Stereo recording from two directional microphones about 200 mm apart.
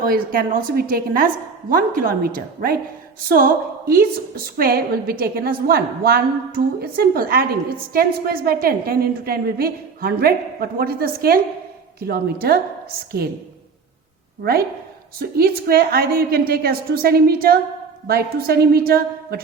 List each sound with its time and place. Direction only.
0.1 s a woman's voice: 45° right (ahead or behind)
15.2 s a woman's voice: 50° right (ahead or behind)